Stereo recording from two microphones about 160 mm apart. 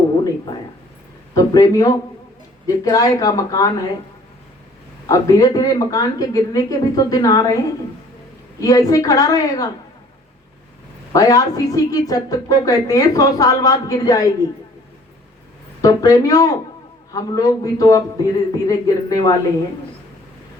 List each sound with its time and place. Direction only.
1.3 s speech: 20° left (ahead or behind)
5.0 s speech: 20° left (ahead or behind)
8.6 s speech: 20° left (ahead or behind)
11.1 s speech: 20° left (ahead or behind)
15.8 s speech: 20° left (ahead or behind)